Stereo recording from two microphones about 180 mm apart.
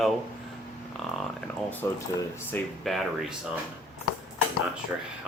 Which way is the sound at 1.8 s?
15° left (ahead or behind).